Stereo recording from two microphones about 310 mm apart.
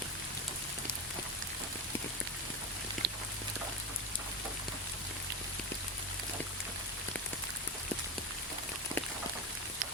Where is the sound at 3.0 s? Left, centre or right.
Right.